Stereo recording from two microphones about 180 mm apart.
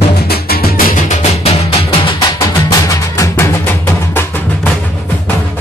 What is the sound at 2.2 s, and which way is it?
Music, 20° left (ahead or behind).